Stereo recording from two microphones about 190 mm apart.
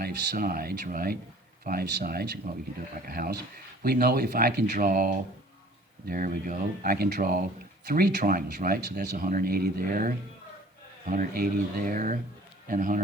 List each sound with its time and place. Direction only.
0.0 s speech: 50° right (ahead or behind)
11.1 s speech: 45° right (ahead or behind)